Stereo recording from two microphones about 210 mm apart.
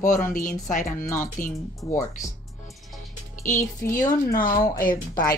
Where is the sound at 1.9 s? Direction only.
15° left (ahead or behind).